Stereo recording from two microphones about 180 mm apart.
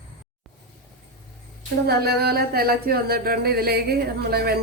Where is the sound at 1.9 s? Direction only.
60° right (ahead or behind).